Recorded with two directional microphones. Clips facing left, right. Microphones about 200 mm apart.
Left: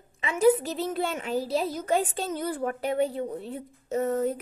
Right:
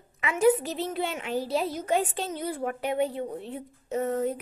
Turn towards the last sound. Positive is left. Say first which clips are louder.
# left 1 dB
turn(degrees=40)  # may be behind; listen again after turning